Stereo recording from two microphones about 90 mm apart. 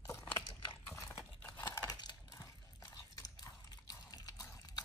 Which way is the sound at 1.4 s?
20° left (ahead or behind).